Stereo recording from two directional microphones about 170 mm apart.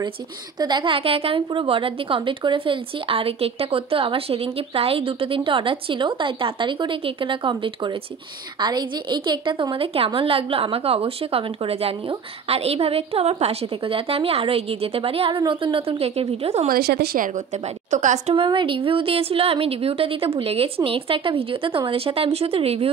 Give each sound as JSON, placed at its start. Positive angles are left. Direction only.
{"t": 0.6, "sound": "a woman's voice", "side_deg": -25}
{"t": 16.6, "sound": "a woman's voice", "side_deg": -65}
{"t": 17.9, "sound": "a woman's voice", "side_deg": -45}
{"t": 18.3, "sound": "a woman's voice", "side_deg": -30}